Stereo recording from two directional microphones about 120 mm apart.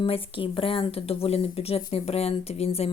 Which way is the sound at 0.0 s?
45° left (ahead or behind).